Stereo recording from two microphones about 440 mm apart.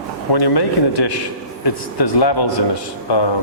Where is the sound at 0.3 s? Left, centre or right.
Left.